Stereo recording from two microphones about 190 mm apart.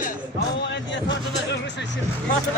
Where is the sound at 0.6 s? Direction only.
65° left (ahead or behind).